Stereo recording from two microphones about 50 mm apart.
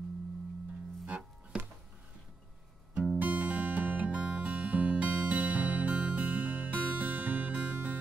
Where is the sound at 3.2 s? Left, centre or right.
Right.